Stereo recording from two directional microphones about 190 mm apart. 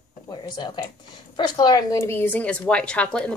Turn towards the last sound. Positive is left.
turn(degrees=5)  # may be behind; listen again after turning